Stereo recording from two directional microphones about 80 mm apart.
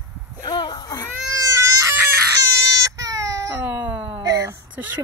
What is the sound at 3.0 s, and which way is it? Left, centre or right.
Baby cry, right.